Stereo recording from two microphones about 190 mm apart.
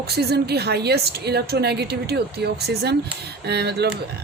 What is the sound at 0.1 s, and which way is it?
A woman's voice, 55° right (ahead or behind).